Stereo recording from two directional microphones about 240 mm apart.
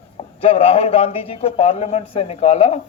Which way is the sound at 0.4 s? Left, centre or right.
Left.